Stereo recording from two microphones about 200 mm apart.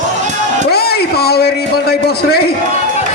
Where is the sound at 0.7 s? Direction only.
50° left (ahead or behind).